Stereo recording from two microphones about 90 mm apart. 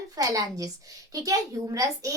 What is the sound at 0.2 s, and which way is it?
A child's voice, 40° right (ahead or behind).